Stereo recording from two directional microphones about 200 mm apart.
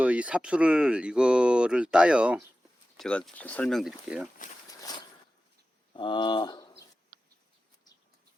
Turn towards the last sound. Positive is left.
turn(degrees=20)  # may be behind; listen again after turning